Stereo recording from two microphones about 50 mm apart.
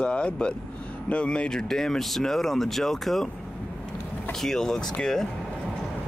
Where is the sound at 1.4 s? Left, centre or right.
Centre.